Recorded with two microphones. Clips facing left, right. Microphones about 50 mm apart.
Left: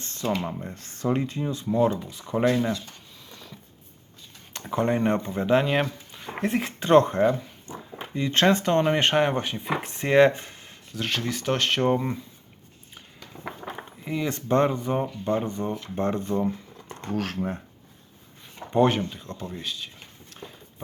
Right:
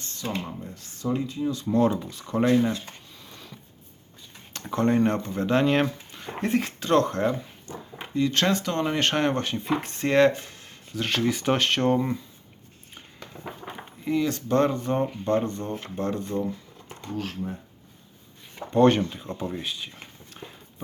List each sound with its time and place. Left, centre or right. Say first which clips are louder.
0.0 s speech: left 4 dB; left
0.7 s speech: left 2 dB; left
1.6 s speech: even; centre
4.5 s speech: right 2 dB; centre
5.8 s a sound: right 3 dB; centre
6.7 s speech: left 7 dB; left
8.8 s speech: left 2 dB; centre
10.7 s speech: right 1 dB; centre
14.0 s speech: right 5 dB; centre
14.3 s speech: left 3 dB; left
16.0 s speech: left 3 dB; left
17.0 s speech: left 3 dB; left
19.1 s speech: right 4 dB; centre